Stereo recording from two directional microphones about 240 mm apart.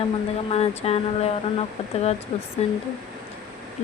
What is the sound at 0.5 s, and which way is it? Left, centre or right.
Speech, left.